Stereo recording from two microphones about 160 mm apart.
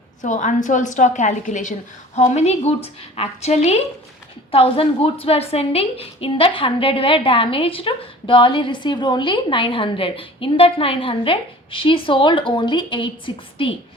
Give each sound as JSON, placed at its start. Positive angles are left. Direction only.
{"t": 0.2, "sound": "a woman's voice", "side_deg": 50}